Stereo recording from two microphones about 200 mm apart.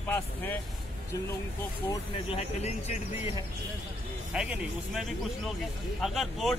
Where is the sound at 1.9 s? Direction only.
30° left (ahead or behind).